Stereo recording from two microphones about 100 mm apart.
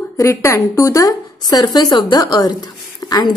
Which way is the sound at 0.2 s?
25° left (ahead or behind).